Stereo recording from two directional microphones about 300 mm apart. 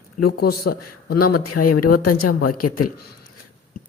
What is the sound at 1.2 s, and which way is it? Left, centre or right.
A woman's voice, left.